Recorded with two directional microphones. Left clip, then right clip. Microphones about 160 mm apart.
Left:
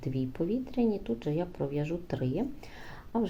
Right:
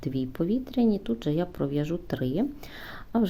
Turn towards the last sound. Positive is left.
turn(degrees=-40)  # may be behind; listen again after turning